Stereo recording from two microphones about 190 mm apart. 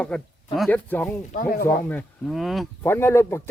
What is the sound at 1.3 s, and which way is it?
Speech, 50° left (ahead or behind).